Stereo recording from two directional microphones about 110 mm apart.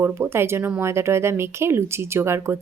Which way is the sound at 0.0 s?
20° right (ahead or behind).